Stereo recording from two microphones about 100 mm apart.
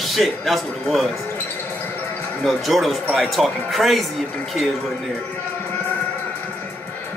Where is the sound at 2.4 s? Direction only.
Centre (ahead or behind).